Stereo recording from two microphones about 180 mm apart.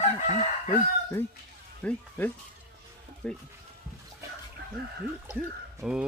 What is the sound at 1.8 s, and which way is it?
Speech, 10° left (ahead or behind).